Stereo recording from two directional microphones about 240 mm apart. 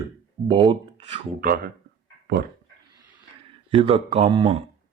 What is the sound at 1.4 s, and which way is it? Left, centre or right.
Speech, right.